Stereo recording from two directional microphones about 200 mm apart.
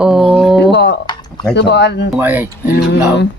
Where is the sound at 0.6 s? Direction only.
55° left (ahead or behind).